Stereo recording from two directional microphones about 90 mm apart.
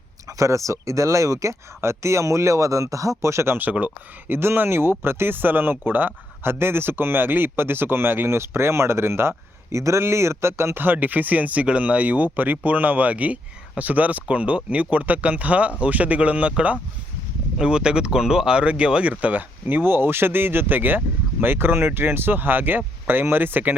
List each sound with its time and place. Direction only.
0.3 s speech: 35° right (ahead or behind)